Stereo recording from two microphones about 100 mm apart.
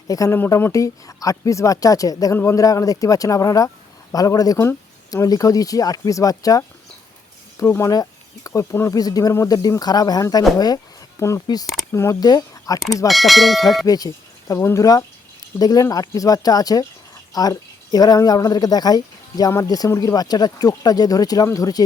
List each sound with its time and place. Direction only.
0.1 s speech: 35° left (ahead or behind)
2.3 s speech: 25° left (ahead or behind)
12.2 s speech: 40° left (ahead or behind)
13.1 s speech: centre (ahead or behind)
13.8 s speech: 35° left (ahead or behind)